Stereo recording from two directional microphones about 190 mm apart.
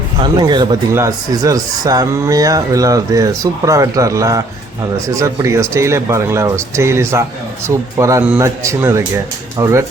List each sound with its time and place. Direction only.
0.2 s speech: 25° right (ahead or behind)